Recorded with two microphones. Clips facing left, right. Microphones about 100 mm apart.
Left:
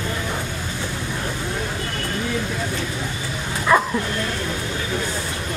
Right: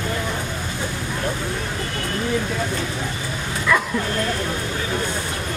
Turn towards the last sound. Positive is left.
turn(degrees=35)  # may be behind; listen again after turning